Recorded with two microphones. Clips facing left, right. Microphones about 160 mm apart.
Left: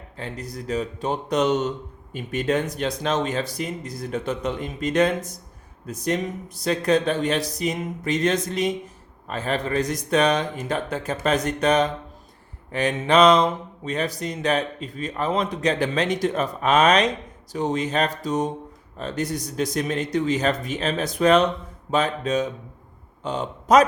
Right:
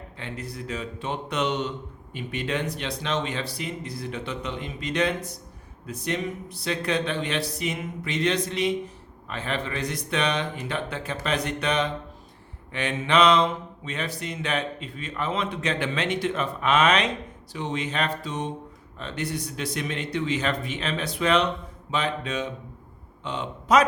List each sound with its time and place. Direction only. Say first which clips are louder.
0.2 s mantra: left 3 dB; 40° left (ahead or behind)
2.1 s speech: left 6 dB; 45° left (ahead or behind)
12.7 s mantra: left 4 dB; 40° left (ahead or behind)
21.8 s speech: left 5 dB; 45° left (ahead or behind)